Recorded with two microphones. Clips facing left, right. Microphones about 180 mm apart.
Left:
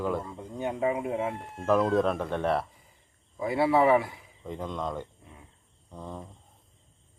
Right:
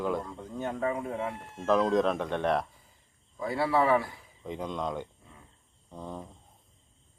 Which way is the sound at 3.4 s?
20° left (ahead or behind).